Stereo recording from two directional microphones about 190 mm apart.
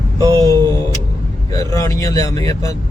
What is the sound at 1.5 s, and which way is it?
Speech, 20° left (ahead or behind).